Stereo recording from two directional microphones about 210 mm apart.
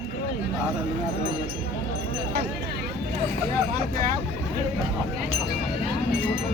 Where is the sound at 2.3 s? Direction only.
50° right (ahead or behind).